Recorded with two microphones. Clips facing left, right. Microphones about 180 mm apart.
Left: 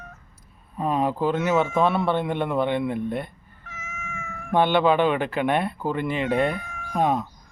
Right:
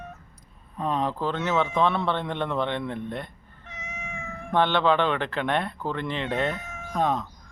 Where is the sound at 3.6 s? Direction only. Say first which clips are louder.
Even; 25° right (ahead or behind).